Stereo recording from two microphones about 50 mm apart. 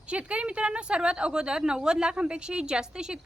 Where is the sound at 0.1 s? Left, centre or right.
Right.